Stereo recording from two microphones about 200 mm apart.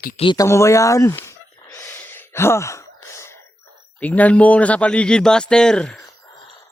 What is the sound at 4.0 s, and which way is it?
A man's voice, 5° left (ahead or behind).